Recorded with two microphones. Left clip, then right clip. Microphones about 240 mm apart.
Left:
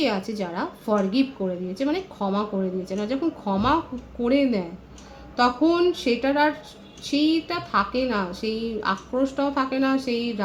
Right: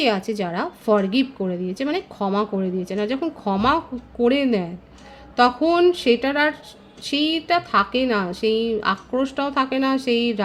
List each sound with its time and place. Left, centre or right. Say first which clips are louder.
0.0 s a woman's voice: right 4 dB; right